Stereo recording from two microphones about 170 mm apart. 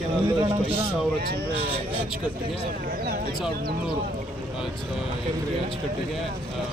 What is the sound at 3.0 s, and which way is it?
Speech, 65° right (ahead or behind).